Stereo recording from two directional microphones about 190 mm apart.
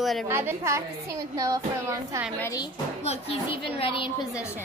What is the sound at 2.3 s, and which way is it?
Music, 15° left (ahead or behind).